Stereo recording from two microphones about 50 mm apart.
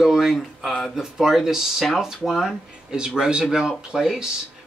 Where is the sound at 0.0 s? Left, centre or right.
Centre.